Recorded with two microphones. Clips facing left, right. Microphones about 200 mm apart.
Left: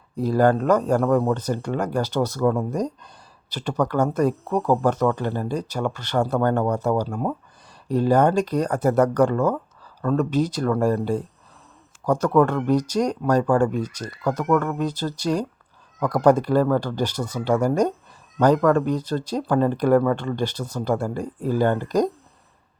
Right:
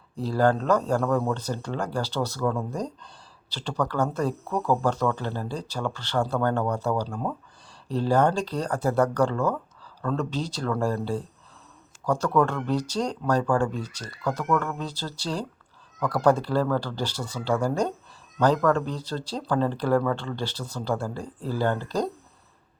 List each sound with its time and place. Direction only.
0.2 s speech: 10° left (ahead or behind)
9.3 s a sound: 20° left (ahead or behind)
10.1 s speech: 10° left (ahead or behind)
12.6 s speech: 10° left (ahead or behind)